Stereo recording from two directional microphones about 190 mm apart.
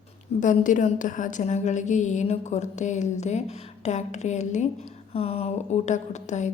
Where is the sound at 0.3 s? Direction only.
40° left (ahead or behind).